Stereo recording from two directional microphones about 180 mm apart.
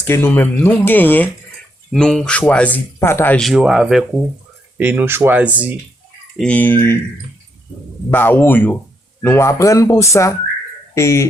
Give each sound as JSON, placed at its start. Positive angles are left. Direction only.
{"t": 0.0, "sound": "speech", "side_deg": 10}
{"t": 6.3, "sound": "speech", "side_deg": 5}
{"t": 8.1, "sound": "speech", "side_deg": 10}